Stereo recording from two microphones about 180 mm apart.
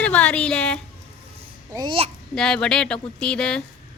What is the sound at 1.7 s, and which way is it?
Speech, 25° right (ahead or behind).